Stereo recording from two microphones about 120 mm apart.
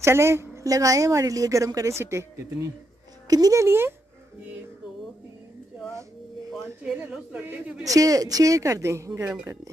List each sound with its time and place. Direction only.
0.0 s a woman's voice: 20° right (ahead or behind)
6.5 s a man's voice: 10° right (ahead or behind)
7.8 s a woman's voice: 30° right (ahead or behind)